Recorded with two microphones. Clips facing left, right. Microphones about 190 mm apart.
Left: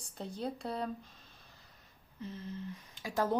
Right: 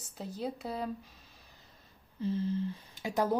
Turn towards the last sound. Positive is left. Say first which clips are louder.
# right 2 dB
turn(degrees=-10)  # may be behind; listen again after turning